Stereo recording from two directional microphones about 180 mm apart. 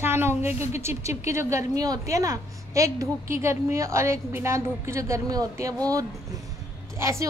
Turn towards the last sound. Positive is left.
turn(degrees=-15)  # may be behind; listen again after turning